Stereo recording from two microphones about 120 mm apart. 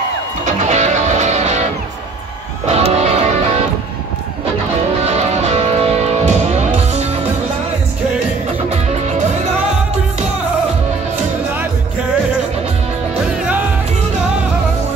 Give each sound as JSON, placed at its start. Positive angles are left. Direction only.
{"t": 0.5, "sound": "music", "side_deg": -70}
{"t": 5.0, "sound": "music", "side_deg": -65}